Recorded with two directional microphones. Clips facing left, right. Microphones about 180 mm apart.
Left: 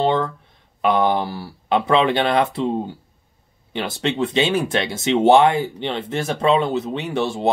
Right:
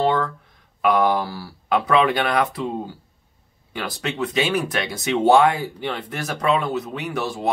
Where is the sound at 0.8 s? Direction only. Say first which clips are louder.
Left 1 dB; 25° left (ahead or behind).